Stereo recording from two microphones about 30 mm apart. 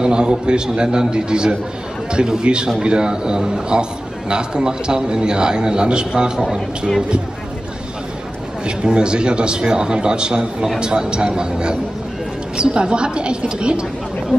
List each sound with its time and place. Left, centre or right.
0.0 s a man's voice: right
8.6 s a man's voice: right